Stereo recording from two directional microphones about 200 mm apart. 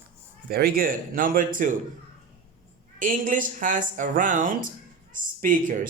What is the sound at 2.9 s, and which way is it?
Speech, 40° right (ahead or behind).